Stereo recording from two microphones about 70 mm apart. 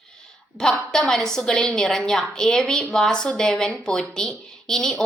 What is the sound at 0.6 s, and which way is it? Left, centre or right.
A woman's voice, centre.